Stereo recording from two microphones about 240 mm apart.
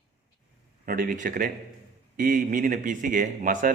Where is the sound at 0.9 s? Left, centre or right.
Right.